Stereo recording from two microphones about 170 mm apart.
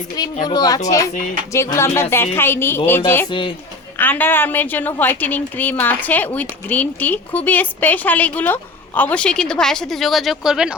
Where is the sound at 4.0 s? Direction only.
10° left (ahead or behind).